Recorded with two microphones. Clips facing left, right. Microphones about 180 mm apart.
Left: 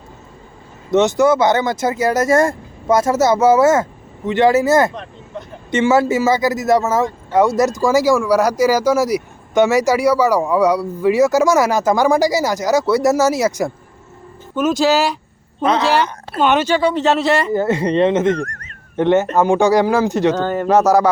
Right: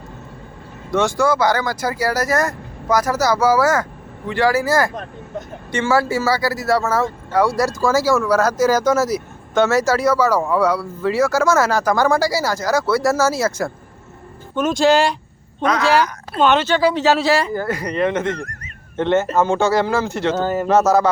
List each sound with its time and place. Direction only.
0.9 s speech: 20° left (ahead or behind)
14.5 s speech: 5° left (ahead or behind)
15.6 s speech: 25° left (ahead or behind)
16.4 s speech: 15° left (ahead or behind)
16.8 s speech: centre (ahead or behind)
17.5 s speech: 25° left (ahead or behind)
18.4 s a sound: 5° right (ahead or behind)
18.9 s speech: 15° left (ahead or behind)
20.3 s speech: 5° right (ahead or behind)
20.7 s speech: 15° left (ahead or behind)